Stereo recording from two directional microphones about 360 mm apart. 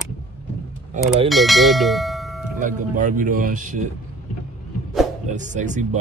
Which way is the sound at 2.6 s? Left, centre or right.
Right.